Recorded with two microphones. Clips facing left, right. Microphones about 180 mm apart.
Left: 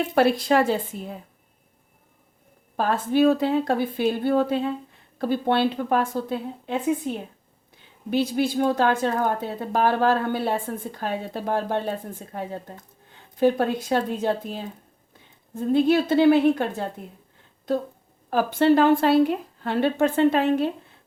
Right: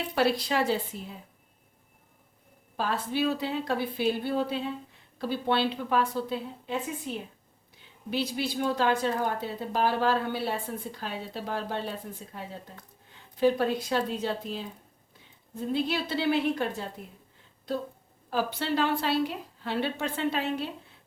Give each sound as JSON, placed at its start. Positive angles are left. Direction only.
{"t": 0.0, "sound": "speech", "side_deg": 50}
{"t": 2.7, "sound": "speech", "side_deg": 50}